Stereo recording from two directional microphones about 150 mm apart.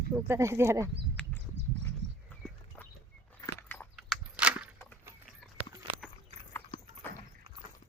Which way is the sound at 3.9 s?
5° right (ahead or behind).